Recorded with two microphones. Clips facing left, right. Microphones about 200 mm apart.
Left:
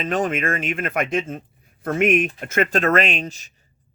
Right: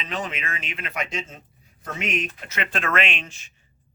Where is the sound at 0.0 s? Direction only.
50° left (ahead or behind).